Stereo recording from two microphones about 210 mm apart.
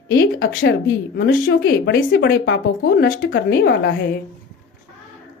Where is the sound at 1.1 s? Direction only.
55° left (ahead or behind).